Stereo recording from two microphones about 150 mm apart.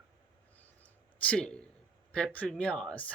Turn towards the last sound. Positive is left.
turn(degrees=5)  # may be behind; listen again after turning